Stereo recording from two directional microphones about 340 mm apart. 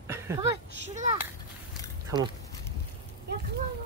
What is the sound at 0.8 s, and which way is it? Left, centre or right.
Speech, right.